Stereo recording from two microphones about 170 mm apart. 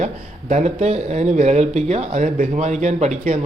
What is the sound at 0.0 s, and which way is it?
Speech, 40° right (ahead or behind).